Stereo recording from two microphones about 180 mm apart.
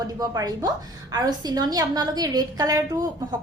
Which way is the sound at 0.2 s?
20° right (ahead or behind).